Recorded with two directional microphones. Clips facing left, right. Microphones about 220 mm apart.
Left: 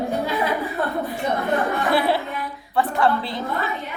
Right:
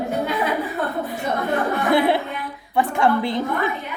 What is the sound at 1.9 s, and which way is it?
A woman's voice, 20° right (ahead or behind).